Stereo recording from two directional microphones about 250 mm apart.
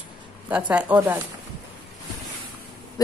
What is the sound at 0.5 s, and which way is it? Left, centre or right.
Speech, centre.